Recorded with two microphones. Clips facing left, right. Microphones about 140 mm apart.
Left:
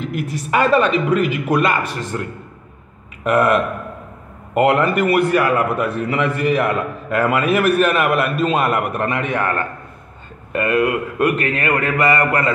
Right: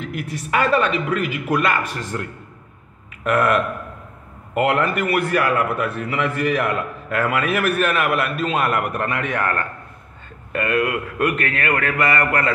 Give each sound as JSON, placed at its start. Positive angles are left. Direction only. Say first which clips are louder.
{"t": 0.1, "sound": "a man's voice", "louder": "left 2 dB", "side_deg": 40}
{"t": 3.3, "sound": "a man's voice", "louder": "left 3 dB", "side_deg": 30}